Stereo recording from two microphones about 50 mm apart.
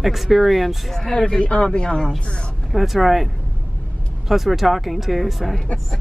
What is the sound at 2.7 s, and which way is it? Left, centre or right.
Speech, centre.